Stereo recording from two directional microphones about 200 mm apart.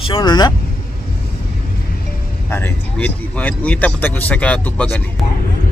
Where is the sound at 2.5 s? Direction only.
10° left (ahead or behind).